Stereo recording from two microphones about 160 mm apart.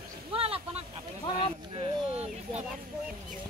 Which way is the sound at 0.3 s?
35° right (ahead or behind).